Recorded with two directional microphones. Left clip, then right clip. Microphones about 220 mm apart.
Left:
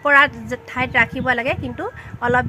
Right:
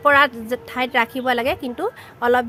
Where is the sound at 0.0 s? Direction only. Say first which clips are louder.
Left 1 dB; 40° right (ahead or behind).